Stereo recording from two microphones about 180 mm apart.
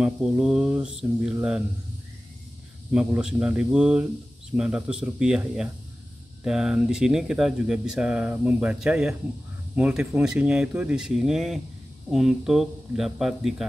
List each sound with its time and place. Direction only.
0.0 s speech: 5° right (ahead or behind)
2.9 s speech: 5° right (ahead or behind)